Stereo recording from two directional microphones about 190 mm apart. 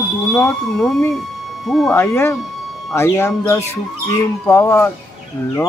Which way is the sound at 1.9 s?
15° left (ahead or behind).